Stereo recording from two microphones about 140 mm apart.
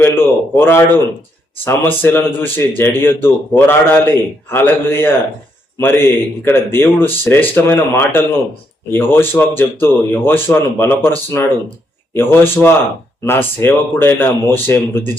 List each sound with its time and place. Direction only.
0.0 s speech: 15° left (ahead or behind)
12.1 s speech: 15° left (ahead or behind)